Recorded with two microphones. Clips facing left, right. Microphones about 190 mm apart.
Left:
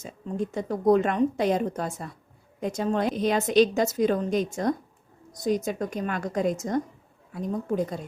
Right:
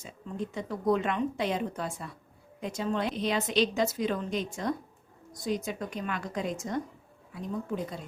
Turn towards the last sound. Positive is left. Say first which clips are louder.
# left 6 dB
turn(degrees=45)  # may be behind; listen again after turning